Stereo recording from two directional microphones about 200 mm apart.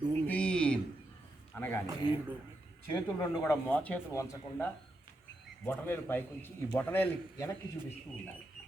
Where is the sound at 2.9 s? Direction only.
15° left (ahead or behind).